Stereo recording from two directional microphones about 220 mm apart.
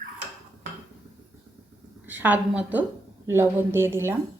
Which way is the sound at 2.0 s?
10° right (ahead or behind).